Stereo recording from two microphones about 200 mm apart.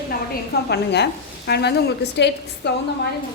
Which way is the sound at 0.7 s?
55° left (ahead or behind).